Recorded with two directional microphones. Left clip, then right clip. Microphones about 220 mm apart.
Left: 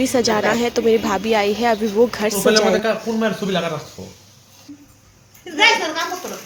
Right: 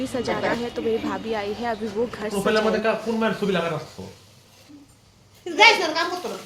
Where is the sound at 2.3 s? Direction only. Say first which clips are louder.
Left 6 dB; 15° left (ahead or behind).